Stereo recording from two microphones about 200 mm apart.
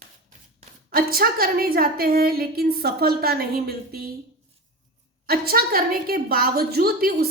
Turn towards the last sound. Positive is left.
turn(degrees=-50)  # may be behind; listen again after turning